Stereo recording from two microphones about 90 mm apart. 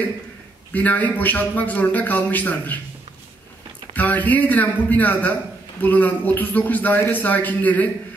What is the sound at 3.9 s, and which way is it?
A man's voice, 20° left (ahead or behind).